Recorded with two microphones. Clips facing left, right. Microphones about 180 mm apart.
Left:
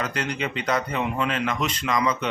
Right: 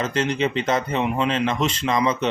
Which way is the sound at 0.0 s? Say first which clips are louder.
Right 6 dB; 25° right (ahead or behind).